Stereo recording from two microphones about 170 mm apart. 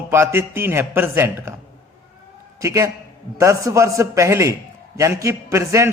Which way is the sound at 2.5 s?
20° right (ahead or behind).